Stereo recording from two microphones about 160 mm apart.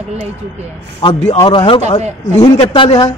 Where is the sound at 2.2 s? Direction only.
45° left (ahead or behind).